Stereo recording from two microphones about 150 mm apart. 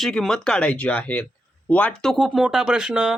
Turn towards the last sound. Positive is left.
turn(degrees=-5)  # may be behind; listen again after turning